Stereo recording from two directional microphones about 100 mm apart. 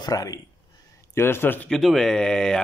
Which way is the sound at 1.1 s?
25° left (ahead or behind).